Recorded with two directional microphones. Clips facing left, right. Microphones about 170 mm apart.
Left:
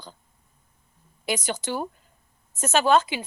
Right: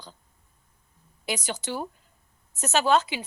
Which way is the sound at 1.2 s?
50° left (ahead or behind).